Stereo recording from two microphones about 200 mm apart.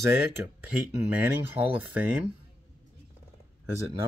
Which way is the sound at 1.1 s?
10° right (ahead or behind).